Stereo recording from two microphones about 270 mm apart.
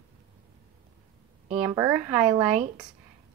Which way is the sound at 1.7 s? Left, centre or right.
Centre.